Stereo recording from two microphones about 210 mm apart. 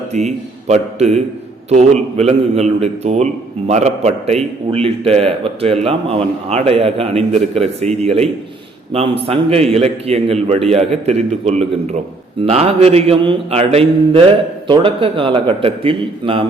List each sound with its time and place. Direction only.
0.3 s a man's voice: 30° right (ahead or behind)